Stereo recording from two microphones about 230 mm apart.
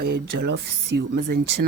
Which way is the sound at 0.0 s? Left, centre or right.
Right.